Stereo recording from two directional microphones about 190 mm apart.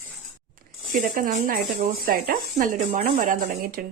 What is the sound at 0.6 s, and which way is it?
A woman's voice, 45° right (ahead or behind).